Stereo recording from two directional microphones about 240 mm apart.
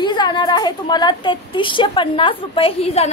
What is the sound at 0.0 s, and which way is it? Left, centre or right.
A woman's voice, centre.